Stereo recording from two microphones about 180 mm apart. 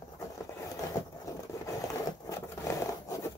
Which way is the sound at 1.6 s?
15° left (ahead or behind).